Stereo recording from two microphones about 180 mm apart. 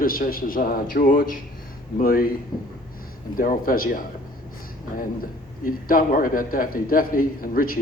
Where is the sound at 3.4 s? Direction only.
50° left (ahead or behind).